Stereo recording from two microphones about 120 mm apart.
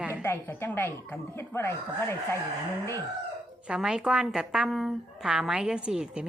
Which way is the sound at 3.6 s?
5° right (ahead or behind).